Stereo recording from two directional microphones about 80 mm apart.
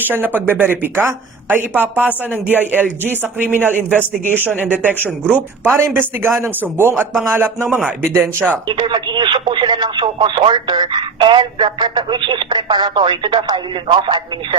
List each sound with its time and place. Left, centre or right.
0.1 s a woman's voice: right
8.6 s speech: right